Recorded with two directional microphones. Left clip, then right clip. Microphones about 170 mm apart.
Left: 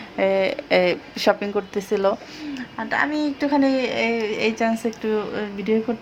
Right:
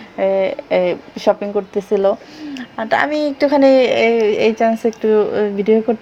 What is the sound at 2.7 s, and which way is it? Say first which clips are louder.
Speech: right 7 dB; 35° right (ahead or behind).